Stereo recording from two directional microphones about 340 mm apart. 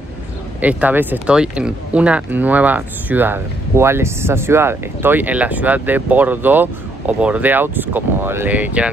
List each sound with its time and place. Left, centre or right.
0.6 s speech: centre